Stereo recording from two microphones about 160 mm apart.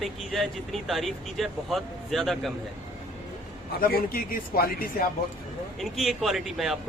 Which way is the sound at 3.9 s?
65° left (ahead or behind).